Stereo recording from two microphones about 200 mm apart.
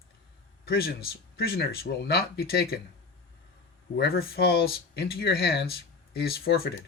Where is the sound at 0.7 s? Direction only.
50° left (ahead or behind).